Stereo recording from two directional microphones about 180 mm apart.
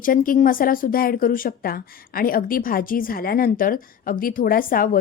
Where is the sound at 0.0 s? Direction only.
50° left (ahead or behind).